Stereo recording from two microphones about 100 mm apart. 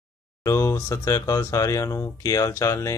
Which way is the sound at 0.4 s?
30° left (ahead or behind).